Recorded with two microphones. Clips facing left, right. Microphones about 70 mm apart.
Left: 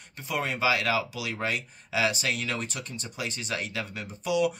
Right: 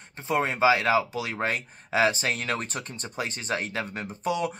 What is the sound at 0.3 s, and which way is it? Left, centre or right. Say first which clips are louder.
Speech: right 5 dB; right.